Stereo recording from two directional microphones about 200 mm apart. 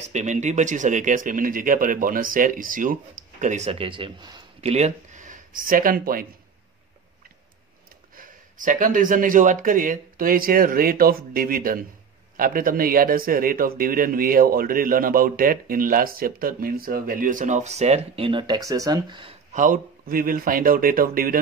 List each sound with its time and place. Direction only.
0.0 s speech: 35° right (ahead or behind)
8.2 s speech: 40° right (ahead or behind); by 19.3 s 25° right (ahead or behind)
19.5 s speech: 40° right (ahead or behind)